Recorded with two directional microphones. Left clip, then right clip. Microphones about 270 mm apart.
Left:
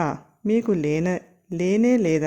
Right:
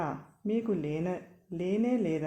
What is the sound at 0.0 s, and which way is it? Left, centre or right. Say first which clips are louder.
Speech: left 9 dB; left.